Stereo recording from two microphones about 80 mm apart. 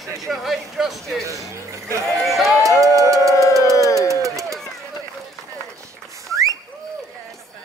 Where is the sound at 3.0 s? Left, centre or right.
Right.